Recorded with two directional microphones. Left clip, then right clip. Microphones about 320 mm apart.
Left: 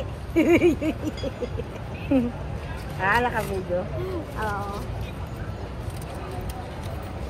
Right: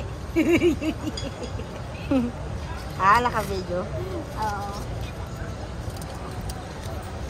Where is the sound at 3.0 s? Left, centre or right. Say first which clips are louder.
Right 4 dB; right.